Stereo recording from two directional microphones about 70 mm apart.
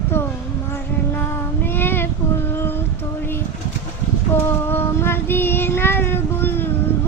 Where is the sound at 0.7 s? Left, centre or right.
Left.